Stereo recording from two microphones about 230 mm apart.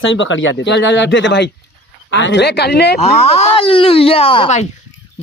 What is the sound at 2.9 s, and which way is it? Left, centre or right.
Speech, left.